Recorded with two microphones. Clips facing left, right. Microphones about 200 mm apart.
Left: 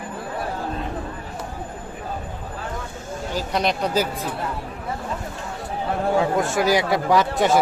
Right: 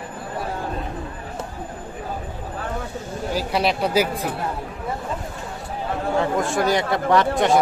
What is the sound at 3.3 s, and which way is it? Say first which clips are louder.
Speech: right 1 dB; 5° right (ahead or behind).